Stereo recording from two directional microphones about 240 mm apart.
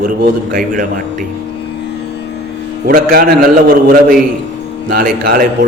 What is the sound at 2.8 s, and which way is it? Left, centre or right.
A man's voice, right.